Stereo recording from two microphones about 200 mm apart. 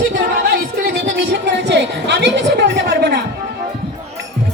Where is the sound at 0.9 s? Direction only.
60° right (ahead or behind).